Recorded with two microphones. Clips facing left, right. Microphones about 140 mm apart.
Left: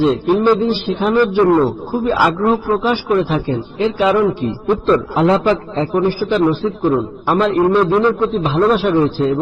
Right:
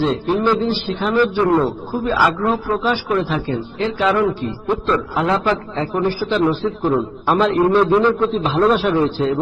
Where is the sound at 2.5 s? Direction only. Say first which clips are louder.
Left 3 dB; 10° left (ahead or behind).